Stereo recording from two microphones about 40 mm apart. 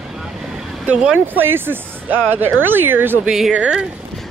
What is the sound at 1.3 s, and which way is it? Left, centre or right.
Speech, right.